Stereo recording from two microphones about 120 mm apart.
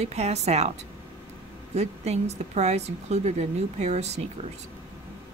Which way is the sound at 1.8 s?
65° right (ahead or behind).